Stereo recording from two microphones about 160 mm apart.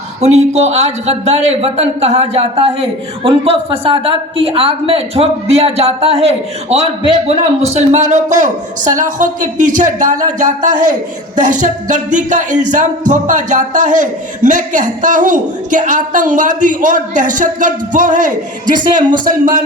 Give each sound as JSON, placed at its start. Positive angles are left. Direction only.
{"t": 0.2, "sound": "music", "side_deg": -45}
{"t": 3.2, "sound": "a woman's voice", "side_deg": -35}
{"t": 7.3, "sound": "music", "side_deg": -45}
{"t": 19.2, "sound": "speech", "side_deg": -60}